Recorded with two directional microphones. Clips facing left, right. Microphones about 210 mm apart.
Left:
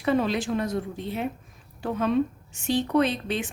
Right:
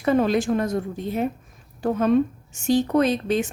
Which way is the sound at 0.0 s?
45° right (ahead or behind).